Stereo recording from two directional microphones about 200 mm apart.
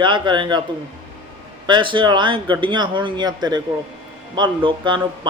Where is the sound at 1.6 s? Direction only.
25° right (ahead or behind).